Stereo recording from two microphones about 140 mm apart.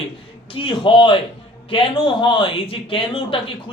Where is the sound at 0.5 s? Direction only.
35° left (ahead or behind).